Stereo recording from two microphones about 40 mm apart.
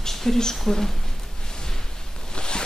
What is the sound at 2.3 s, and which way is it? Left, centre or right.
Zipper, left.